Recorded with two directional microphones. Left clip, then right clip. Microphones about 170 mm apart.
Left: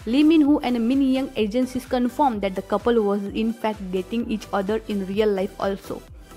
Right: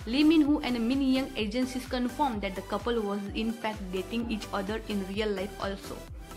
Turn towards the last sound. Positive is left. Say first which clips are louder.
# left 9 dB
turn(degrees=45)  # may be behind; listen again after turning